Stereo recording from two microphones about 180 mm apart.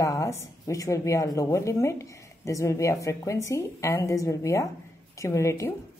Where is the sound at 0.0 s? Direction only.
20° left (ahead or behind).